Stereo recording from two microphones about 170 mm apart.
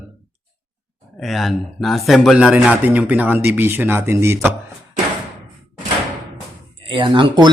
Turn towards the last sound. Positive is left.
turn(degrees=-30)  # may be behind; listen again after turning